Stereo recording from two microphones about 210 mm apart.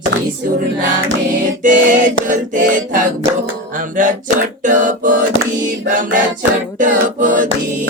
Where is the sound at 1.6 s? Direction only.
40° right (ahead or behind).